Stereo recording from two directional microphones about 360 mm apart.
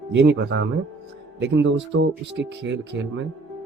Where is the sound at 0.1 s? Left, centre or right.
Right.